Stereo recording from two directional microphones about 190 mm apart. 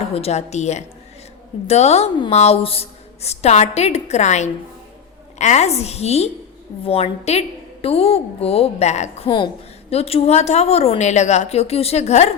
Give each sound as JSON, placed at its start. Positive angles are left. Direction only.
{"t": 0.1, "sound": "a woman's voice", "side_deg": 35}